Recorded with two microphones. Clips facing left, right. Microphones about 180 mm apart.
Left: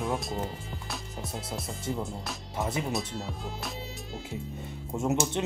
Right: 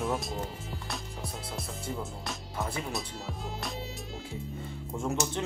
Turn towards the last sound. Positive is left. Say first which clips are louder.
# left 4 dB
turn(degrees=25)  # may be behind; listen again after turning